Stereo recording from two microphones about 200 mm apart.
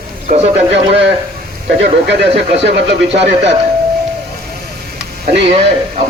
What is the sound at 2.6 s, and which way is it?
Speech, 60° right (ahead or behind).